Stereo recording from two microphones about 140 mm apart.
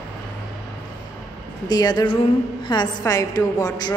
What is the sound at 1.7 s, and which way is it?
A woman's voice, 30° left (ahead or behind).